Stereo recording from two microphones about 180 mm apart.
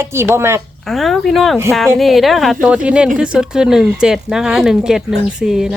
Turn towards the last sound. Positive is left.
turn(degrees=0)  # may be behind; listen again after turning